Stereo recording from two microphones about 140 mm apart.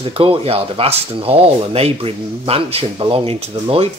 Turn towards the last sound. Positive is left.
turn(degrees=-45)  # may be behind; listen again after turning